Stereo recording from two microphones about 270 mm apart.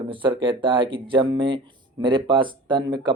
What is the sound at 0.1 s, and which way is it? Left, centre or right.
Speech, centre.